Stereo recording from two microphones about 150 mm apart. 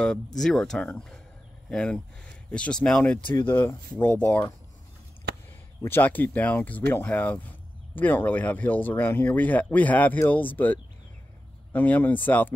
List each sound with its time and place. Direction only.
0.4 s speech: 5° left (ahead or behind)
5.8 s speech: 15° left (ahead or behind)